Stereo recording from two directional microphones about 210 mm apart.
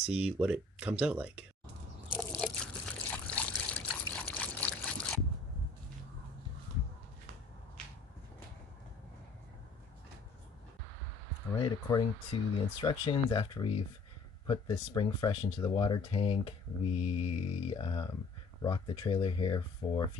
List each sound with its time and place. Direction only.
0.1 s speech: 5° right (ahead or behind)
2.1 s trickle: 5° left (ahead or behind)
11.5 s speech: 20° left (ahead or behind)